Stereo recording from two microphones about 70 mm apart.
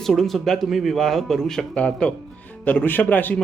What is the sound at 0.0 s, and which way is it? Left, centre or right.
Speech, centre.